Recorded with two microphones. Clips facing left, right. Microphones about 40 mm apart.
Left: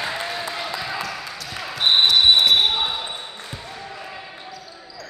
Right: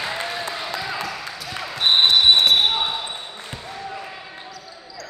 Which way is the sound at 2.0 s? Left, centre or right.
Right.